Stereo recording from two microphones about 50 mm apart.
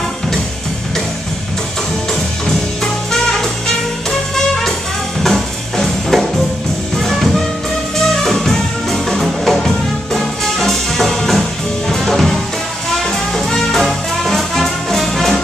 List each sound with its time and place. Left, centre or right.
2.4 s music: centre
5.2 s music: centre